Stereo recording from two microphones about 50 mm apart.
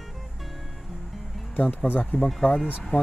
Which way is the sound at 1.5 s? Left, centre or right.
Left.